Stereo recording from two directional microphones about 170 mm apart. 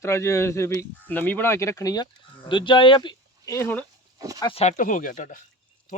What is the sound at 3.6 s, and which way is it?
Speech, 10° left (ahead or behind).